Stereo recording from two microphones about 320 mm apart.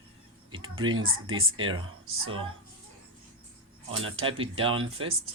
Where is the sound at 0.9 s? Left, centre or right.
Right.